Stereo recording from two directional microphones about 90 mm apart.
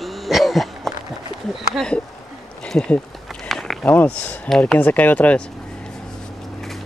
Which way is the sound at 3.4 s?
5° left (ahead or behind).